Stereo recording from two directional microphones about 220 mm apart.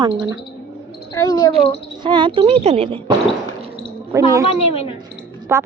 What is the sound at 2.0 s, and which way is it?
A woman's voice, 20° right (ahead or behind).